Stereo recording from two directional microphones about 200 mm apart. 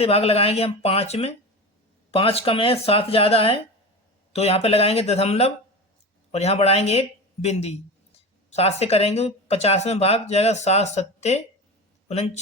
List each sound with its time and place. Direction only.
0.0 s speech: 30° left (ahead or behind)